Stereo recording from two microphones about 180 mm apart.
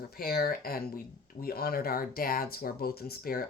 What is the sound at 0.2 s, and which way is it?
Speech, 60° left (ahead or behind).